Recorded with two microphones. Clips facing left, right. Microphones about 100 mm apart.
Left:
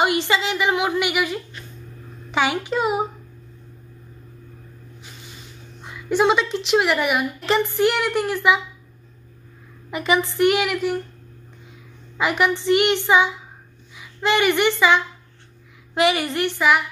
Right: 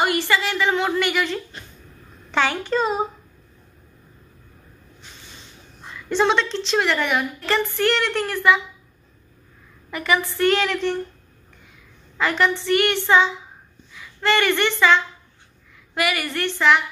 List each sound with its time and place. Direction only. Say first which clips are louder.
0.0 s a woman's voice: left 1 dB; 20° left (ahead or behind)
5.8 s a woman's voice: left 1 dB; 10° left (ahead or behind)
9.8 s a woman's voice: left 2 dB; 20° left (ahead or behind)
12.2 s a woman's voice: even; 15° left (ahead or behind)